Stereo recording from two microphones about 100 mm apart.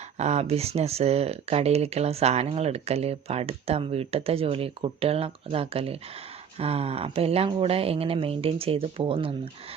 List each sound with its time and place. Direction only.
0.2 s speech: 90° right; by 9.5 s 65° right (ahead or behind)